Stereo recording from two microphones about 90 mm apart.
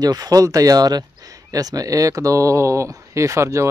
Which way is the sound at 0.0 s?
45° right (ahead or behind).